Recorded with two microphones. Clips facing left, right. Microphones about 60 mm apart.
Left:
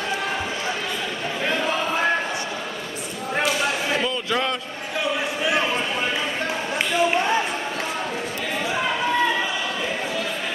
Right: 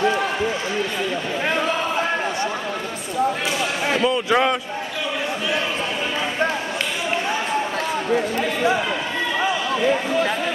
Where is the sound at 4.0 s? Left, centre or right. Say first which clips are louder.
Right 6 dB; centre.